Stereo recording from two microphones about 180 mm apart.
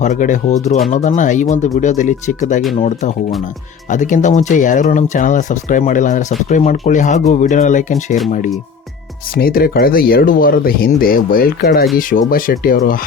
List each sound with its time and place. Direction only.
0.0 s speech: 45° left (ahead or behind)
9.3 s speech: 55° left (ahead or behind)